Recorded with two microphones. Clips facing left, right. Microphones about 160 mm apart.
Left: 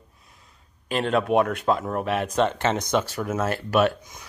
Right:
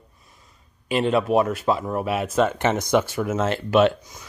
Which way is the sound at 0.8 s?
5° right (ahead or behind).